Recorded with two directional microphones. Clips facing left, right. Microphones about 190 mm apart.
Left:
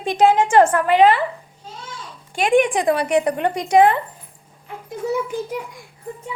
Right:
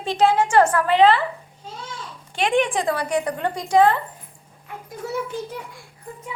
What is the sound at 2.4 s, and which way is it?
Speech, 10° left (ahead or behind).